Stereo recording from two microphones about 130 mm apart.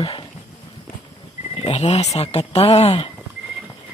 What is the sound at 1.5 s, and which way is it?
Speech, 50° left (ahead or behind).